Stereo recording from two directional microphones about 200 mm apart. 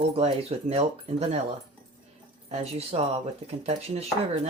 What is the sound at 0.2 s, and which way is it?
Speech, 30° right (ahead or behind).